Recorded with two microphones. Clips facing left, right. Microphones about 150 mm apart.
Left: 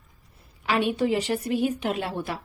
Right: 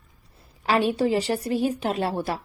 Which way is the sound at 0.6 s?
35° right (ahead or behind).